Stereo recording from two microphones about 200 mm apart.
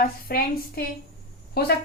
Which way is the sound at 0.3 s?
50° left (ahead or behind).